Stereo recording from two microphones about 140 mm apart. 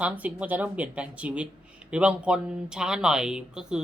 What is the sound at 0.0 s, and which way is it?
A man's voice, 10° right (ahead or behind).